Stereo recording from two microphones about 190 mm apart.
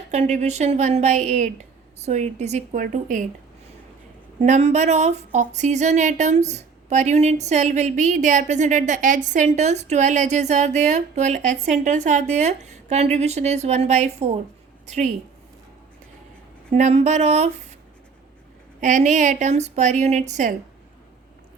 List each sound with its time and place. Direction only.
0.1 s speech: 35° right (ahead or behind)
4.4 s a woman's voice: 40° right (ahead or behind)
16.7 s speech: 35° right (ahead or behind)
18.8 s speech: 40° right (ahead or behind)